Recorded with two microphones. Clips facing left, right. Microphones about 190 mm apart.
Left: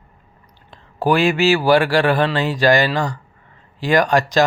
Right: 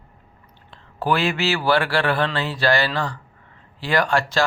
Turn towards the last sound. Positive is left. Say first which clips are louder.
# left 5 dB
turn(degrees=15)  # may be behind; listen again after turning